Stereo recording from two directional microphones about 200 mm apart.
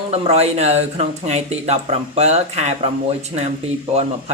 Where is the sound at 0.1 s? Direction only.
30° right (ahead or behind).